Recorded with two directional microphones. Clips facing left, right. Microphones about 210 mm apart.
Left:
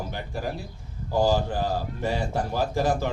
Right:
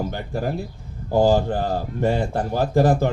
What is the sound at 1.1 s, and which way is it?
A man's voice, 55° right (ahead or behind).